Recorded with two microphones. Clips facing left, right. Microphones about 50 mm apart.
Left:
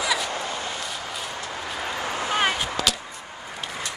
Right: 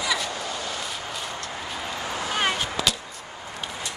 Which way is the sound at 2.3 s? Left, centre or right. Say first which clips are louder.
Left 2 dB; centre.